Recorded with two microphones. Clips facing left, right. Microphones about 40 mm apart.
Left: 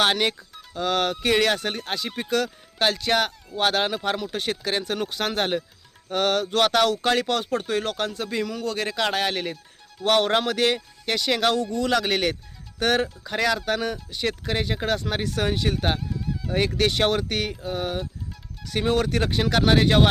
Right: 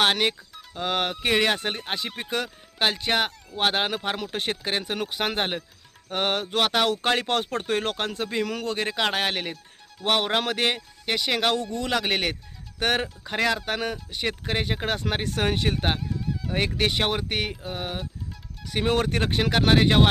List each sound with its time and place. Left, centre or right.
0.0 s speech: centre
6.9 s speech: right
10.0 s speech: centre
10.4 s speech: right
10.8 s speech: centre
11.5 s speech: right
16.0 s music: centre
16.5 s speech: centre
18.9 s speech: right